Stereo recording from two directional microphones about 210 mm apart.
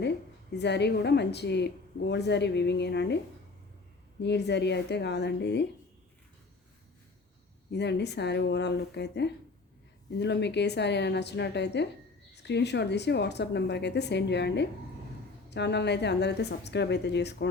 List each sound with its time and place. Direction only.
0.5 s a woman's voice: 55° left (ahead or behind)
4.2 s a woman's voice: 55° left (ahead or behind)
7.7 s a woman's voice: 55° left (ahead or behind)